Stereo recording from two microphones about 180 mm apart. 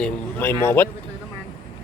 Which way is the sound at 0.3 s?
10° left (ahead or behind).